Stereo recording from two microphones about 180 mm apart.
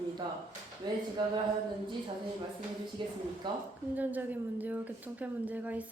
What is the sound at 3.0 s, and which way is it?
Speech, 25° right (ahead or behind).